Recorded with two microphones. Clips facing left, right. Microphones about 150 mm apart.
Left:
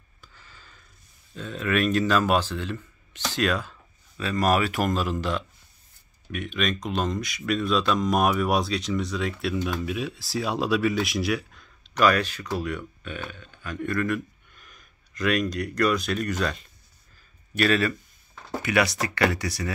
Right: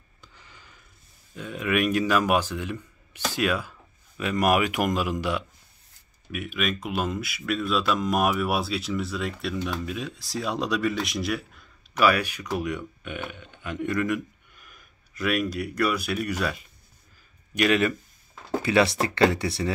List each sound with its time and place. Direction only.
0.2 s a sound: 20° right (ahead or behind)
1.3 s speech: 10° right (ahead or behind)
18.6 s speech: 25° right (ahead or behind)